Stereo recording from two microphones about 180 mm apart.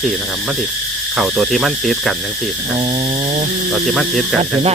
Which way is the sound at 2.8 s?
35° right (ahead or behind).